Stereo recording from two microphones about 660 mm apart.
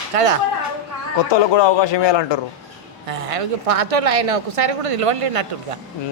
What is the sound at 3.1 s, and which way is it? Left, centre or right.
Speech, right.